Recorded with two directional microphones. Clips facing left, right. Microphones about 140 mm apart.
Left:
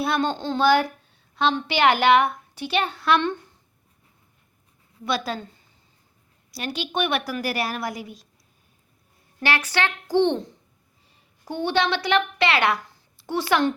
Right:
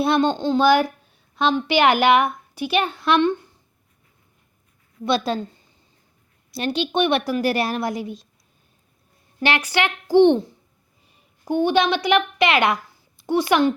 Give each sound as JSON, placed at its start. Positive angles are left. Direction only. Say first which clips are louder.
{"t": 0.0, "sound": "a woman's voice", "louder": "right 5 dB", "side_deg": -20}
{"t": 5.0, "sound": "a woman's voice", "louder": "right 5 dB", "side_deg": -25}
{"t": 6.5, "sound": "a woman's voice", "louder": "right 6 dB", "side_deg": -25}
{"t": 9.4, "sound": "a woman's voice", "louder": "right 3 dB", "side_deg": -15}